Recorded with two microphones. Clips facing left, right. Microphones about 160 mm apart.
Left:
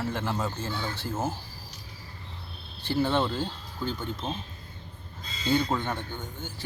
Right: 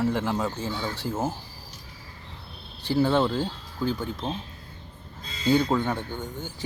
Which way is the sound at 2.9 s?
15° right (ahead or behind).